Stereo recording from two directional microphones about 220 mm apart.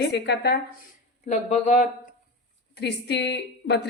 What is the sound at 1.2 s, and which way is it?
Speech, 35° left (ahead or behind).